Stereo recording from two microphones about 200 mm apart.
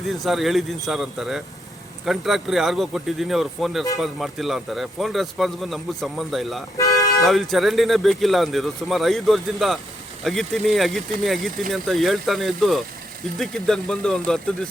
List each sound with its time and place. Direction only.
0.1 s a man's voice: centre (ahead or behind)
6.7 s toot: 15° left (ahead or behind)
7.2 s a man's voice: centre (ahead or behind)